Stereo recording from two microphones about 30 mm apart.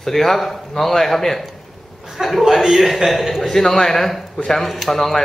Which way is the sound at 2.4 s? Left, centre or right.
Centre.